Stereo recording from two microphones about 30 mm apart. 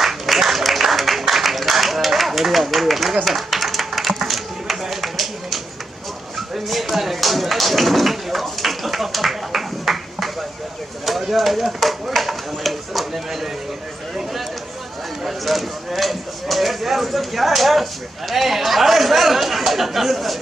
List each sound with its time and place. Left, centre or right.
0.0 s applause: centre
1.2 s a sound: centre
15.2 s speech: centre